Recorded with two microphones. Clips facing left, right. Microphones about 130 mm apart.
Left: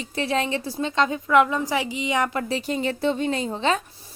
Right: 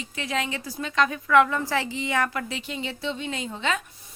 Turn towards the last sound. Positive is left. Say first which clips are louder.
# left 5 dB
turn(degrees=35)  # may be behind; listen again after turning